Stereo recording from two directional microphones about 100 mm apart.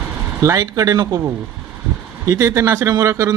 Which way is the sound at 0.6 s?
40° right (ahead or behind).